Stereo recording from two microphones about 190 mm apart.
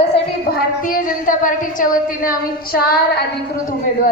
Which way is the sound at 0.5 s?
45° left (ahead or behind).